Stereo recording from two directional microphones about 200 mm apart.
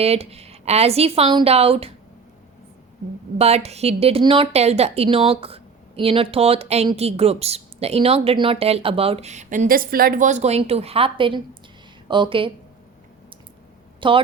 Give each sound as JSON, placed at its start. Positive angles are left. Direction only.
{"t": 0.0, "sound": "a woman's voice", "side_deg": -30}
{"t": 3.3, "sound": "a woman's voice", "side_deg": -30}
{"t": 14.0, "sound": "a woman's voice", "side_deg": -25}